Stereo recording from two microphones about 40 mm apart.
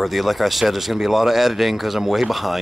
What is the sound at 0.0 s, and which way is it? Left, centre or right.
Speech, centre.